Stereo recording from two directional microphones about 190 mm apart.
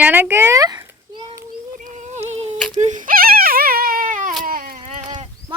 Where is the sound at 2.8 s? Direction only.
40° right (ahead or behind).